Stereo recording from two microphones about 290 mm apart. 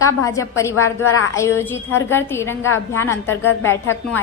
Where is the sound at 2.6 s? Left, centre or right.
Left.